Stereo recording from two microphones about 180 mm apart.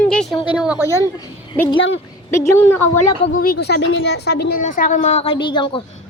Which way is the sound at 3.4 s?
60° left (ahead or behind).